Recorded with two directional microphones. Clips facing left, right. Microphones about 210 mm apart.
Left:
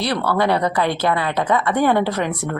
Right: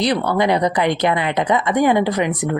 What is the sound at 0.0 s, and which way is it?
Speech, 15° right (ahead or behind).